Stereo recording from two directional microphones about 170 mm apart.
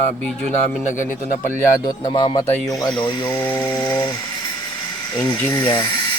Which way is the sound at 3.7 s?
20° left (ahead or behind).